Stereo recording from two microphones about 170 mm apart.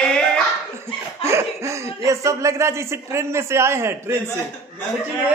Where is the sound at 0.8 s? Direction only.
15° right (ahead or behind).